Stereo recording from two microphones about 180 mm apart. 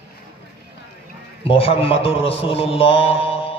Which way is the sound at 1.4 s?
30° left (ahead or behind).